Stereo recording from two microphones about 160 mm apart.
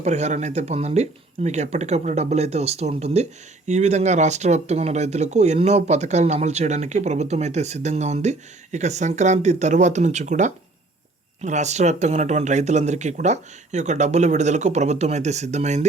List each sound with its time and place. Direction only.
0.0 s speech: 45° right (ahead or behind)